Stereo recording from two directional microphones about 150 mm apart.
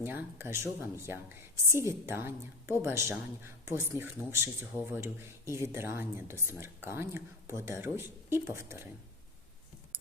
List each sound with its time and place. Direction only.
0.0 s speech: 15° right (ahead or behind)